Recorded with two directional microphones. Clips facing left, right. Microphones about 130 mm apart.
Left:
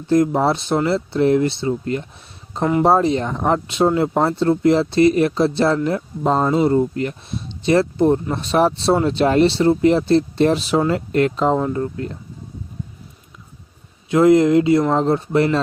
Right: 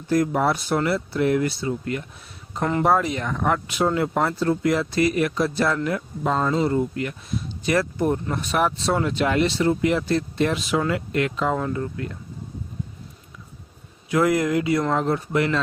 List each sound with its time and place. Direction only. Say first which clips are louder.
0.1 s speech: left 5 dB; 25° left (ahead or behind)
14.1 s speech: left 8 dB; 25° left (ahead or behind)